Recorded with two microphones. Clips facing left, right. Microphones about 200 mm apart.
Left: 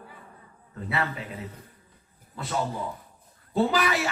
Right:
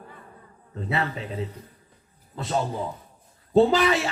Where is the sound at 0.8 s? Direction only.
25° right (ahead or behind).